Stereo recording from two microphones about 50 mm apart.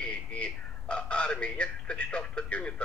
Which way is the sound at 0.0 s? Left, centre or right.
Left.